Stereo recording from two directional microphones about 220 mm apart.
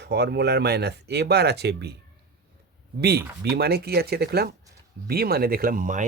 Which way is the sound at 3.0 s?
45° right (ahead or behind).